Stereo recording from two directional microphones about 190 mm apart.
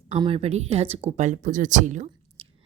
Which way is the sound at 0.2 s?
30° right (ahead or behind).